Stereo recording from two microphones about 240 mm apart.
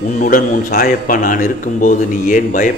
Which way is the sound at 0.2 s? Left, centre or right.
Left.